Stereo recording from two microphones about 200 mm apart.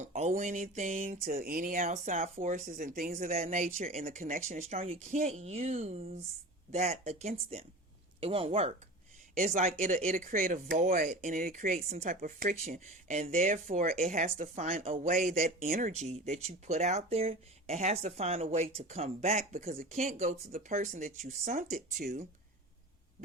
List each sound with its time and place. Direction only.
0.0 s speech: 35° right (ahead or behind)